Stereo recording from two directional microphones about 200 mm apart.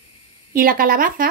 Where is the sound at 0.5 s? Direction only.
45° right (ahead or behind).